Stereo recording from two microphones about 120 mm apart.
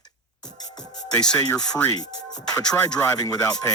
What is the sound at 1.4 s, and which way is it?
Speech, 30° left (ahead or behind).